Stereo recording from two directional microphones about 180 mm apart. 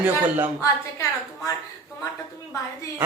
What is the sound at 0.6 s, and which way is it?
Speech, 15° left (ahead or behind).